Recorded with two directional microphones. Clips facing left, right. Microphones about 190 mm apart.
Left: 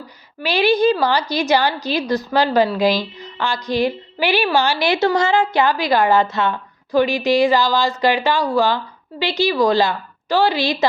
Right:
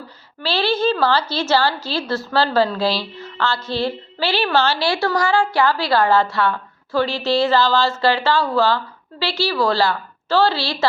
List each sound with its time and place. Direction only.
0.4 s a woman's voice: 15° left (ahead or behind)